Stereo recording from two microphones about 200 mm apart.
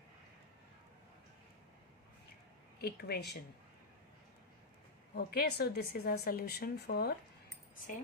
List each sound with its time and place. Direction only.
2.8 s speech: 50° left (ahead or behind)
5.1 s speech: 50° left (ahead or behind)